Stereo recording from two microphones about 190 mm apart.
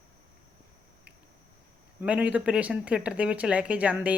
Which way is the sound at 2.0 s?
5° right (ahead or behind).